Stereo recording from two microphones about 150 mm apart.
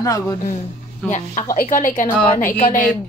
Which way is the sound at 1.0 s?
5° left (ahead or behind).